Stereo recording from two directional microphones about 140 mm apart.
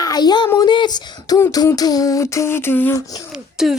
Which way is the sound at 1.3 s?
20° left (ahead or behind).